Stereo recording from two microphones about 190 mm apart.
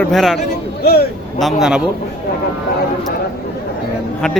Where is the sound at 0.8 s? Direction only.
55° left (ahead or behind).